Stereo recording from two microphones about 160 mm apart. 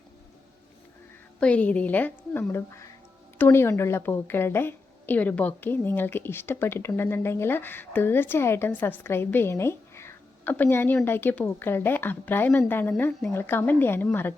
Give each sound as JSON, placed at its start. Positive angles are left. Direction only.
{"t": 1.4, "sound": "a woman's voice", "side_deg": 10}